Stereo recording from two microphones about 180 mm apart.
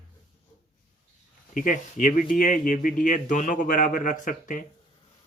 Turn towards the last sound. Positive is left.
turn(degrees=45)  # may be behind; listen again after turning